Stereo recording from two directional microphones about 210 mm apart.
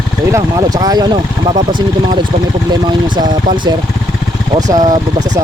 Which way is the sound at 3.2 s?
20° right (ahead or behind).